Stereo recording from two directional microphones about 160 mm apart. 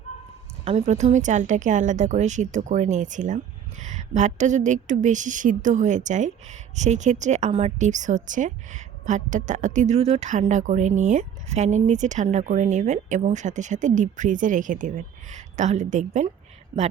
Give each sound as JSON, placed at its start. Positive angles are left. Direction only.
{"t": 0.6, "sound": "a woman's voice", "side_deg": -45}